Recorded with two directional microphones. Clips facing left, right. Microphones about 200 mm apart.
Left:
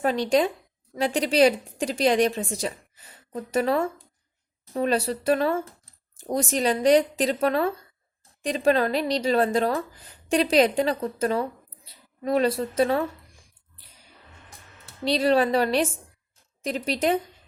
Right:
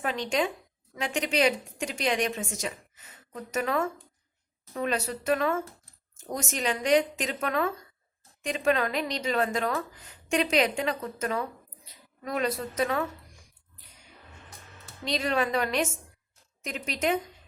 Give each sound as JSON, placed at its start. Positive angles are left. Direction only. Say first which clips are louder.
{"t": 0.0, "sound": "speech", "louder": "left 7 dB", "side_deg": 35}
{"t": 15.0, "sound": "speech", "louder": "left 7 dB", "side_deg": 35}